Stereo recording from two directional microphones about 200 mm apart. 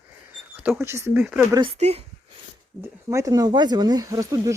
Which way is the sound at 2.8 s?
15° right (ahead or behind).